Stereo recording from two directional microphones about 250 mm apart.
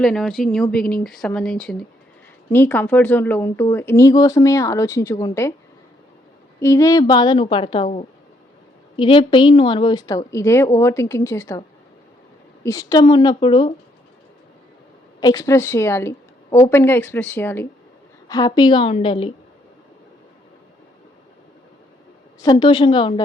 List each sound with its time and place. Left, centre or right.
0.0 s speech: centre
6.6 s a woman's voice: centre
12.6 s speech: centre
15.2 s a woman's voice: centre
22.4 s speech: centre